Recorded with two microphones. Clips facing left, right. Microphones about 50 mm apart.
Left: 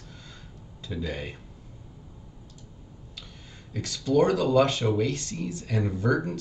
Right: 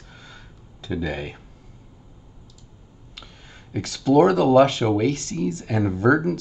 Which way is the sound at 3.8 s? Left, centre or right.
Right.